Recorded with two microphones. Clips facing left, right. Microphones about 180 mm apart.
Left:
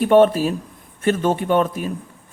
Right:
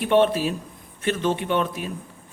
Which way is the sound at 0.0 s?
45° left (ahead or behind).